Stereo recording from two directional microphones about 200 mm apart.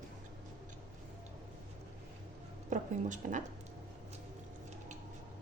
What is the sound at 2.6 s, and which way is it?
Speech, 40° right (ahead or behind).